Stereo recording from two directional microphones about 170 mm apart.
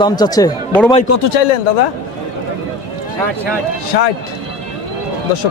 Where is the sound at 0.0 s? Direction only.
25° left (ahead or behind).